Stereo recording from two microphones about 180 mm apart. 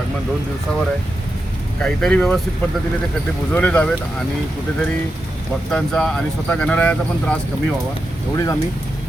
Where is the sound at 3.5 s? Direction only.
10° left (ahead or behind).